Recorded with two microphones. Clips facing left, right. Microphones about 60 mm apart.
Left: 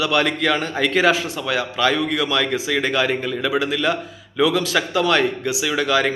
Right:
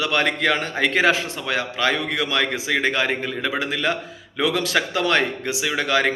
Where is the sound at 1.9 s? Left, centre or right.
Right.